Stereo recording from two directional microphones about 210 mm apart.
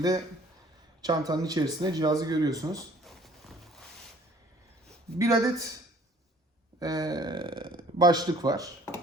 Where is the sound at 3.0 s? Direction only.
Centre (ahead or behind).